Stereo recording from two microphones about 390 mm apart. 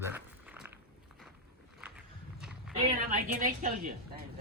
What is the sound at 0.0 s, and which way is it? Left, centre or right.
Walk, centre.